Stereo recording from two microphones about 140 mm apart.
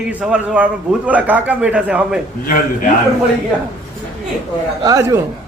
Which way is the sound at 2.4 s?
85° left.